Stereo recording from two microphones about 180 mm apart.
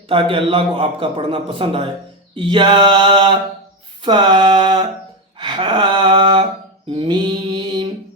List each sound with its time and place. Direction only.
0.1 s a man's voice: 30° right (ahead or behind)
5.4 s a sound: 25° right (ahead or behind)
6.8 s mantra: 30° right (ahead or behind)